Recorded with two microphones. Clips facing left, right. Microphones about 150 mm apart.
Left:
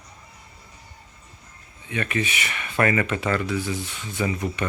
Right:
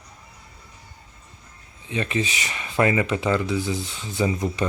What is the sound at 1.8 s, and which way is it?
Speech, 25° right (ahead or behind).